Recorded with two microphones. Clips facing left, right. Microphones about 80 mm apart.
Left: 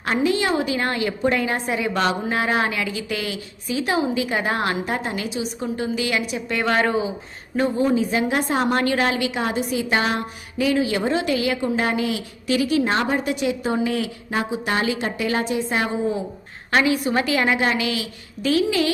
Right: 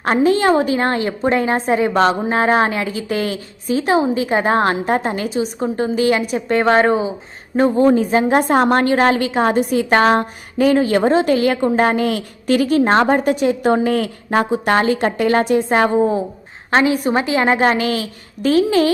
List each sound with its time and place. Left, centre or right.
0.0 s a woman's voice: right
7.8 s a woman's voice: right
16.7 s a woman's voice: right